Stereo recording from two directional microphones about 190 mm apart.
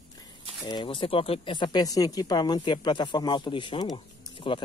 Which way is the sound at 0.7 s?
25° left (ahead or behind).